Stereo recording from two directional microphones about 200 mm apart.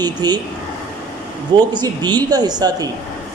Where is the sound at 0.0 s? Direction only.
20° right (ahead or behind).